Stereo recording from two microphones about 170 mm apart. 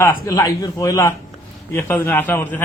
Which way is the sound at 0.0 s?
20° left (ahead or behind).